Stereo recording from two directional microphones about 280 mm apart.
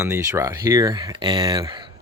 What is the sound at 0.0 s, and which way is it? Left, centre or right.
Speech, centre.